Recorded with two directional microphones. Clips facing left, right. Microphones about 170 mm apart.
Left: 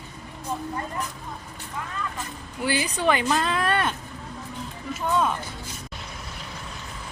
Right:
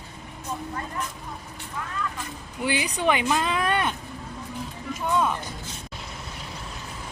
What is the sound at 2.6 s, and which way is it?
Speech, 15° right (ahead or behind).